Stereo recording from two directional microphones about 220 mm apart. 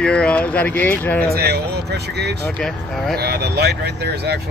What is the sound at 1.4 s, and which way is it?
Speech, 45° right (ahead or behind).